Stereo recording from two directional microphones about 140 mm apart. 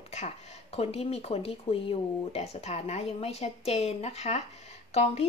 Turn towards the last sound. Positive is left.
turn(degrees=50)  # may be behind; listen again after turning